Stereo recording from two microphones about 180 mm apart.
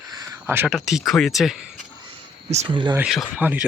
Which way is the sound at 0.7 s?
Centre (ahead or behind).